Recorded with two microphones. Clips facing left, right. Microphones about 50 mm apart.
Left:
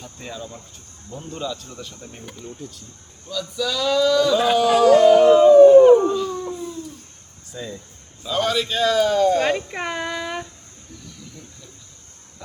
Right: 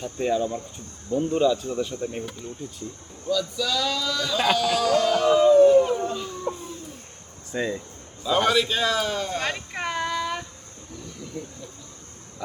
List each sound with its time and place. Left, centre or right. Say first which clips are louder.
0.0 s speech: right 11 dB; centre
2.3 s a man's voice: even; centre
4.5 s a sound: left 10 dB; left
5.6 s howl: left 8 dB; left
6.5 s babbling: right 1 dB; right
8.3 s a man's voice: right 1 dB; centre
9.4 s a sound: left 7 dB; centre